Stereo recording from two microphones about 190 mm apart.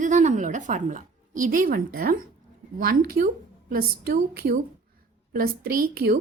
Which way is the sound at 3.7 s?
50° right (ahead or behind).